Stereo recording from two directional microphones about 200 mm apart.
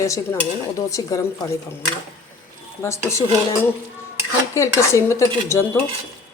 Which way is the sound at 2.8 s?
15° left (ahead or behind).